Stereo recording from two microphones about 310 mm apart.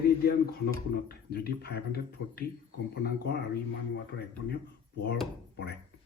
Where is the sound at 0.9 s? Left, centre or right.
Left.